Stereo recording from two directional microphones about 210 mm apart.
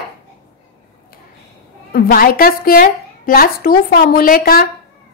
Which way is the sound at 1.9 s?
45° left (ahead or behind).